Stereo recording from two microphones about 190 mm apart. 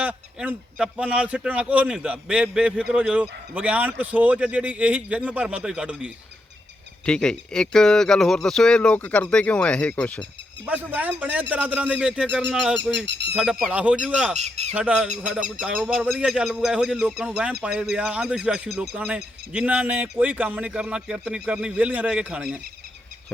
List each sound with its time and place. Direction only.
0.0 s speech: 5° right (ahead or behind)
10.9 s speech: 10° right (ahead or behind)
13.1 s speech: 60° right (ahead or behind)
13.3 s speech: 5° right (ahead or behind)
14.3 s speech: 35° right (ahead or behind)
14.8 s speech: 5° right (ahead or behind)